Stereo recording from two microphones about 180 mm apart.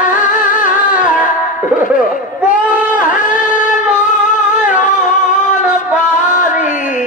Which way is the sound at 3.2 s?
45° left (ahead or behind).